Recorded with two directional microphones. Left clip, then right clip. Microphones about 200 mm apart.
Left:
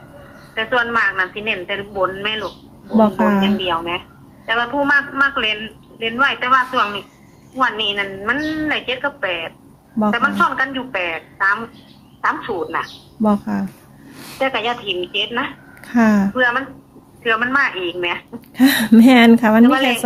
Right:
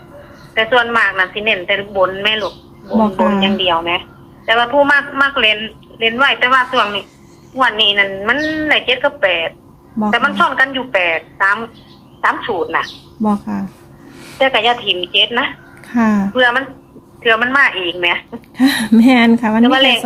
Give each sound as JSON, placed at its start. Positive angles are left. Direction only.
{"t": 0.5, "sound": "a woman's voice", "side_deg": -20}
{"t": 3.0, "sound": "a woman's voice", "side_deg": 10}
{"t": 3.4, "sound": "a woman's voice", "side_deg": -20}
{"t": 13.2, "sound": "a woman's voice", "side_deg": 10}
{"t": 14.3, "sound": "a woman's voice", "side_deg": -20}
{"t": 15.9, "sound": "a woman's voice", "side_deg": 10}
{"t": 16.3, "sound": "a woman's voice", "side_deg": -20}
{"t": 18.5, "sound": "a woman's voice", "side_deg": 15}
{"t": 19.6, "sound": "a woman's voice", "side_deg": -20}